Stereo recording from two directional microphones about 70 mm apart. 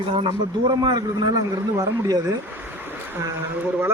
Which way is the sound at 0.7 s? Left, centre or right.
Right.